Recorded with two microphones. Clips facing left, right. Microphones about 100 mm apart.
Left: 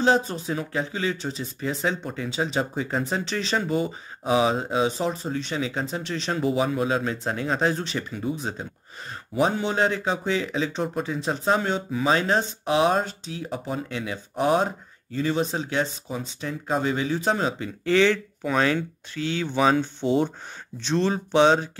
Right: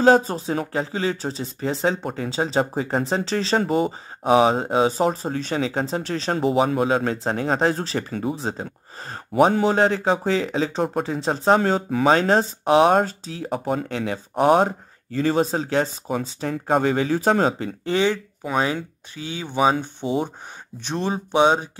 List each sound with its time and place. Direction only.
0.0 s speech: 40° right (ahead or behind)
8.1 s speech: 55° right (ahead or behind)
8.4 s speech: 35° right (ahead or behind)
9.1 s speech: 45° right (ahead or behind)
11.5 s speech: 45° right (ahead or behind)
16.3 s speech: 55° right (ahead or behind)
17.8 s speech: 15° right (ahead or behind)